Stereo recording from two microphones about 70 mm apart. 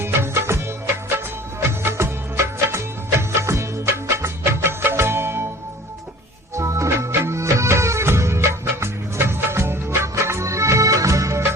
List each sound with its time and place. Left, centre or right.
0.0 s music of bollywood: right
1.6 s music of bollywood: right
6.6 s music: right